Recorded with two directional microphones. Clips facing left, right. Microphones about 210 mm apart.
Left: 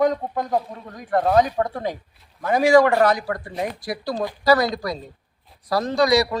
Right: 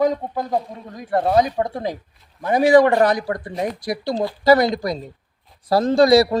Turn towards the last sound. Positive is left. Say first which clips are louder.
# right 5 dB
turn(degrees=-30)  # may be behind; listen again after turning